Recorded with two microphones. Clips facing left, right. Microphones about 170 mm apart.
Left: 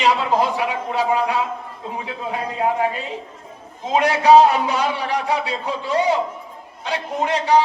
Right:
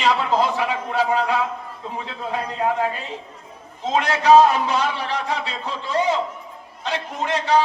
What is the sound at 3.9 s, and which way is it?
A man's voice, 15° left (ahead or behind).